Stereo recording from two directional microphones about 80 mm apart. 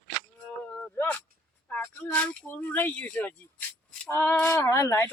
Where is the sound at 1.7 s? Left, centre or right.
Centre.